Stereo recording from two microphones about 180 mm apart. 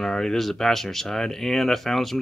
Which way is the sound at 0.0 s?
Centre (ahead or behind).